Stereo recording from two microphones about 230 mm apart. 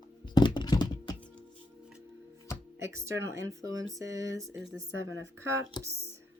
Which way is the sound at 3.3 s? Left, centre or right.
Centre.